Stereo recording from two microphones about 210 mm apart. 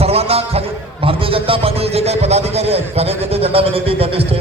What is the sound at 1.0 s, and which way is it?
A man's voice, 25° right (ahead or behind).